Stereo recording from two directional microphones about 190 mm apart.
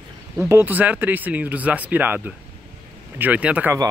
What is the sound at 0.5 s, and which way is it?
Speech, 10° right (ahead or behind).